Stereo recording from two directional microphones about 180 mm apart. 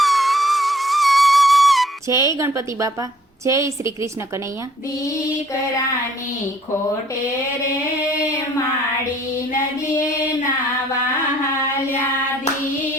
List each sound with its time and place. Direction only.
0.0 s music: centre (ahead or behind)
2.1 s a woman's voice: 15° right (ahead or behind)